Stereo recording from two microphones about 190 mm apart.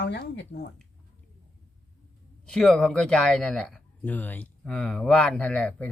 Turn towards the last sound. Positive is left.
turn(degrees=5)  # may be behind; listen again after turning